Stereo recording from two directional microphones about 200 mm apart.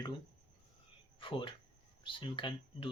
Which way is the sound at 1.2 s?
25° left (ahead or behind).